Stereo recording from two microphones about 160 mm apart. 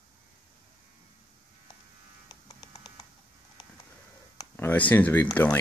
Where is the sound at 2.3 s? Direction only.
30° left (ahead or behind).